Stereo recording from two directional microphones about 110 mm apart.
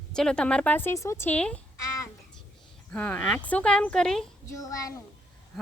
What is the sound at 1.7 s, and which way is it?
Child singing, 30° left (ahead or behind).